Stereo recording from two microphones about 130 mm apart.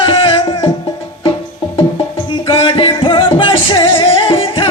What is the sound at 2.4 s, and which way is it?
Music, 45° left (ahead or behind).